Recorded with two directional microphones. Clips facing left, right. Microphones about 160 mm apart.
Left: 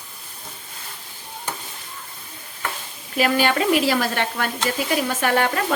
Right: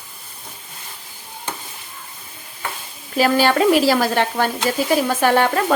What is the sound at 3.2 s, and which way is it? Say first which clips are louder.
Speech: right 4 dB; 35° right (ahead or behind).